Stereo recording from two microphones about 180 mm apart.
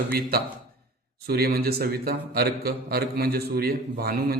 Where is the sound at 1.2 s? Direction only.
60° right (ahead or behind).